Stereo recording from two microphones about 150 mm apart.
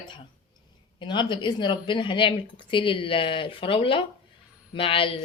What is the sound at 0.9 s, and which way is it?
Speech, 30° left (ahead or behind).